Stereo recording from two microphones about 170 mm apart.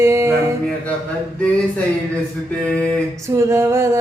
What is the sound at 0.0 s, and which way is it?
Music, 15° right (ahead or behind).